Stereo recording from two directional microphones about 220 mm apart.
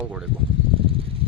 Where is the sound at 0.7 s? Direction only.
25° right (ahead or behind).